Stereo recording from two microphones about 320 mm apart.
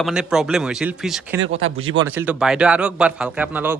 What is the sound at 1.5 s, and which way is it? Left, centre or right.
Speech, right.